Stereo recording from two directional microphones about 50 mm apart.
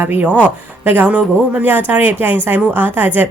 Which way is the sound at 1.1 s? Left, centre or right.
Right.